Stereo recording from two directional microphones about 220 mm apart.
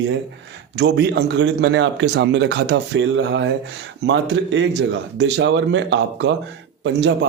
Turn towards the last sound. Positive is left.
turn(degrees=-50)  # may be behind; listen again after turning